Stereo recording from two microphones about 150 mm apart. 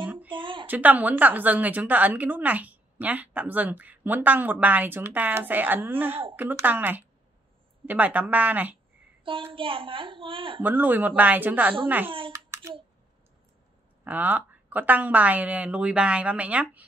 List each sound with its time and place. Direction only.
0.3 s a sound: 35° right (ahead or behind)
0.7 s a woman's voice: 10° right (ahead or behind)
9.2 s a woman's voice: 35° right (ahead or behind)
10.6 s a woman's voice: 10° right (ahead or behind)
12.3 s a sound: 20° right (ahead or behind)
14.0 s a woman's voice: 10° right (ahead or behind)